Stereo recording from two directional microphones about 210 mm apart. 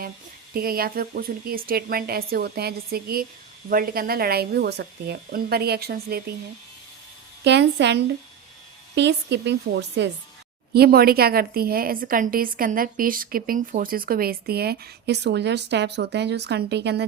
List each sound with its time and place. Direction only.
0.5 s a woman's voice: 45° right (ahead or behind)
7.4 s a woman's voice: 55° right (ahead or behind)